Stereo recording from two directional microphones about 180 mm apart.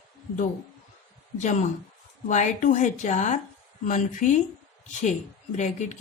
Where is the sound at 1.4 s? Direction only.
40° left (ahead or behind).